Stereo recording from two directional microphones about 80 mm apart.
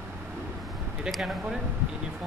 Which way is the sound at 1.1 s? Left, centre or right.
Centre.